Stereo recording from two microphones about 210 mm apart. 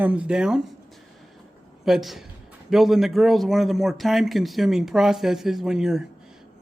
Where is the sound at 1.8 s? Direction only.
Centre (ahead or behind).